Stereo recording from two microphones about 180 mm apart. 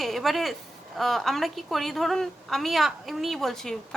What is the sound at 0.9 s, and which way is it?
A woman's voice, centre (ahead or behind).